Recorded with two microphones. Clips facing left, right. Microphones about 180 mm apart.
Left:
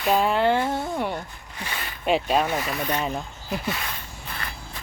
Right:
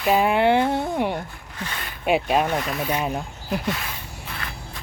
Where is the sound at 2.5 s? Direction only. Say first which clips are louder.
Right 2 dB; centre (ahead or behind).